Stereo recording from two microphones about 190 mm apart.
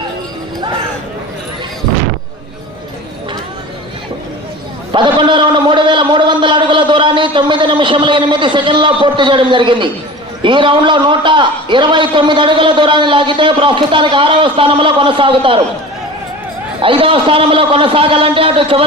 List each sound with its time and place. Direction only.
4.9 s a man's voice: 25° right (ahead or behind)
16.8 s a man's voice: 30° right (ahead or behind)